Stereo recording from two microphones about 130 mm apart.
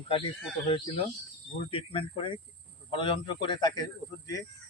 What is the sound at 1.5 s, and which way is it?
A man's voice, 45° left (ahead or behind).